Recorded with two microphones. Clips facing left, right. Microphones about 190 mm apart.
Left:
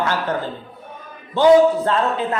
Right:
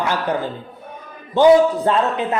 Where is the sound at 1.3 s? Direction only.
15° right (ahead or behind).